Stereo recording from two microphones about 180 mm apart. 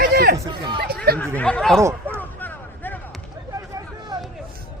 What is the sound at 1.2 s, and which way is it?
Speech, 10° left (ahead or behind).